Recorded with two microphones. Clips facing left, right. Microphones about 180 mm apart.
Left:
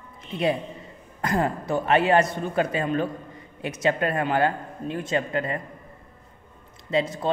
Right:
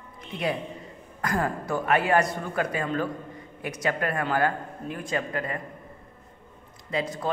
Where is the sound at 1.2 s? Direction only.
25° left (ahead or behind).